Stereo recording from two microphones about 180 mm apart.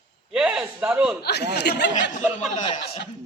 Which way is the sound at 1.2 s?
65° left (ahead or behind).